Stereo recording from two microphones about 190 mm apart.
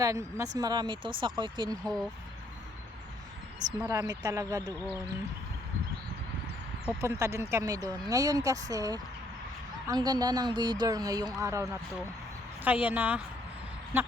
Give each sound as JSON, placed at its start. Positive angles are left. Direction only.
{"t": 0.0, "sound": "speech", "side_deg": -15}
{"t": 1.8, "sound": "speech", "side_deg": 0}
{"t": 3.8, "sound": "speech", "side_deg": -15}
{"t": 7.0, "sound": "speech", "side_deg": -15}